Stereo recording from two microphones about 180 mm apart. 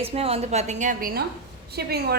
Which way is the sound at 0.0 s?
35° right (ahead or behind).